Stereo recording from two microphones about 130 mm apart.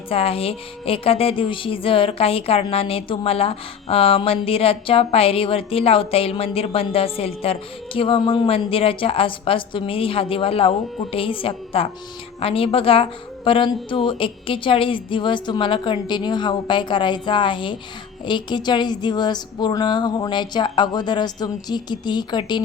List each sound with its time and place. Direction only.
0.1 s a woman's voice: 50° left (ahead or behind)